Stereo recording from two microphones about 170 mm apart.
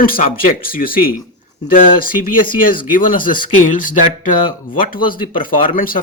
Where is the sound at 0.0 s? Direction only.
55° left (ahead or behind).